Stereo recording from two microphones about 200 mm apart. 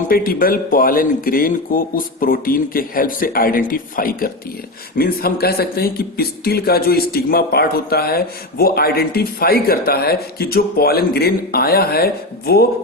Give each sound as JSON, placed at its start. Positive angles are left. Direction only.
{"t": 0.1, "sound": "speech", "side_deg": 45}